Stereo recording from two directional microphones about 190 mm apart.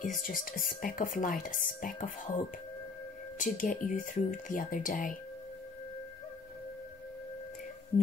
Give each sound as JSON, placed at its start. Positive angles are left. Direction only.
{"t": 0.0, "sound": "speech", "side_deg": 45}